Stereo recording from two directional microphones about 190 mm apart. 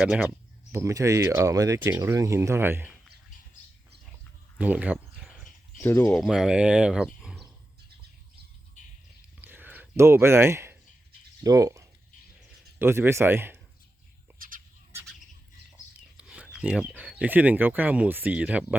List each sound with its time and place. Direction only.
0.0 s speech: 5° right (ahead or behind)
4.5 s a sound: 5° right (ahead or behind)
5.8 s speech: 10° left (ahead or behind)
6.1 s speech: centre (ahead or behind)
8.8 s a sound: 40° left (ahead or behind)
9.4 s a sound: 10° right (ahead or behind)
11.4 s speech: 15° right (ahead or behind)
14.3 s bird: 50° right (ahead or behind)
16.1 s speech: 5° right (ahead or behind)